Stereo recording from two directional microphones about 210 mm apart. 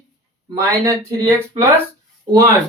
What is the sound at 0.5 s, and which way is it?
Speech, 15° right (ahead or behind).